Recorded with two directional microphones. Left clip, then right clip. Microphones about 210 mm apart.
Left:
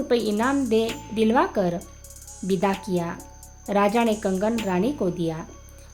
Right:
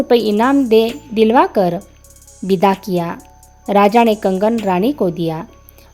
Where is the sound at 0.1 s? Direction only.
30° right (ahead or behind).